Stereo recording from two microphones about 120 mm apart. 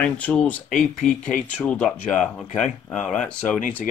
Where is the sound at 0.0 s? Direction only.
10° left (ahead or behind).